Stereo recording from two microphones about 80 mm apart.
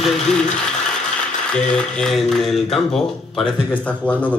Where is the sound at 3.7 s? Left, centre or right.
Centre.